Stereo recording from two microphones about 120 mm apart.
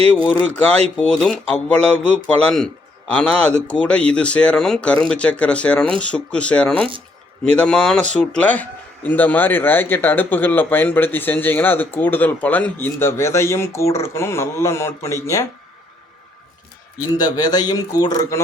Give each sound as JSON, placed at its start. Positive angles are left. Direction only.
{"t": 0.5, "sound": "speech", "side_deg": 10}
{"t": 17.2, "sound": "a man's voice", "side_deg": 35}